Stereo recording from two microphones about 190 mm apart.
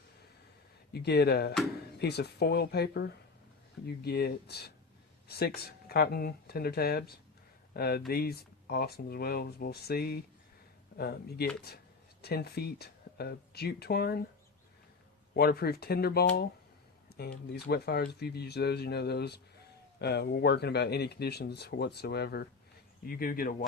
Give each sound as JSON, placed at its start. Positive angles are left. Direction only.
{"t": 0.9, "sound": "speech", "side_deg": 60}
{"t": 15.4, "sound": "speech", "side_deg": 55}
{"t": 17.1, "sound": "a sound", "side_deg": 55}
{"t": 17.5, "sound": "speech", "side_deg": 55}